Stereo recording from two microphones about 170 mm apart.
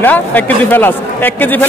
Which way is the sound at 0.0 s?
10° left (ahead or behind).